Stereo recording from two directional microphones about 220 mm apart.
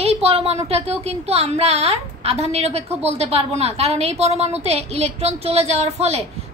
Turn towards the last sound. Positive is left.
turn(degrees=-30)  # may be behind; listen again after turning